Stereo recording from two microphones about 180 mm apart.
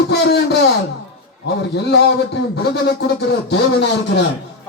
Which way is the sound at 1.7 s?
70° left (ahead or behind).